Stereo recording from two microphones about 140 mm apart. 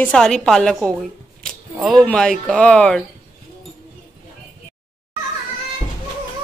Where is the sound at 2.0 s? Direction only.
5° left (ahead or behind).